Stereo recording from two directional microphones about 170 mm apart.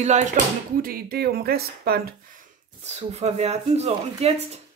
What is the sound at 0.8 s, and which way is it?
Speech, 65° right (ahead or behind).